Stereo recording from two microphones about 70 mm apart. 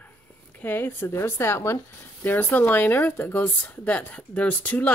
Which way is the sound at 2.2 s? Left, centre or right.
Left.